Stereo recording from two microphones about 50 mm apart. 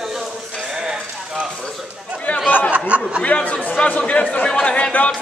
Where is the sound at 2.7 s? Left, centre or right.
Right.